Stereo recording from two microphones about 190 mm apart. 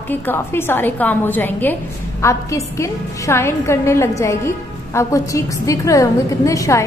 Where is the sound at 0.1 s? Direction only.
10° left (ahead or behind).